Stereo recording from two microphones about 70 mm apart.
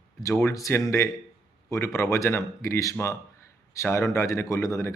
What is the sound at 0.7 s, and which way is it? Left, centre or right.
Speech, left.